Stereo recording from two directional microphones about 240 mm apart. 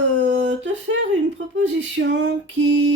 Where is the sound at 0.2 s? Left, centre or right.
Right.